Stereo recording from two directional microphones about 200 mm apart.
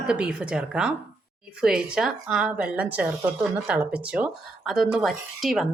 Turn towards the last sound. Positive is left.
turn(degrees=0)  # may be behind; listen again after turning